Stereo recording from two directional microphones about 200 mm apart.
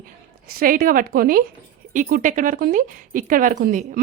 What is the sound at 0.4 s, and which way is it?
Speech, 45° right (ahead or behind).